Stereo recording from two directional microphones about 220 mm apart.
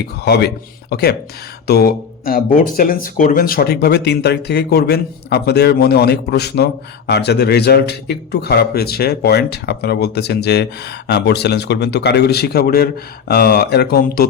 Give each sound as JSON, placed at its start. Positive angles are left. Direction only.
{"t": 0.3, "sound": "a man's voice", "side_deg": 45}